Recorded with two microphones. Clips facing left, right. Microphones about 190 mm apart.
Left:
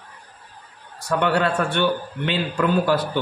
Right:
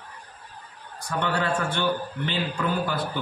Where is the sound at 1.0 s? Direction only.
65° left (ahead or behind).